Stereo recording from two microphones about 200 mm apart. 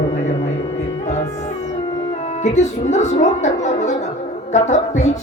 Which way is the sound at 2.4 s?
35° left (ahead or behind).